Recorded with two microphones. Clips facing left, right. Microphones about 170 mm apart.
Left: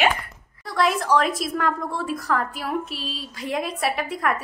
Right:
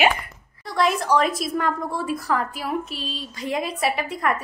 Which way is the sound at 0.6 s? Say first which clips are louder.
Even; centre (ahead or behind).